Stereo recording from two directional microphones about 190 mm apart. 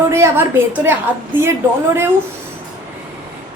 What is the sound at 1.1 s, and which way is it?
Speech, 10° right (ahead or behind).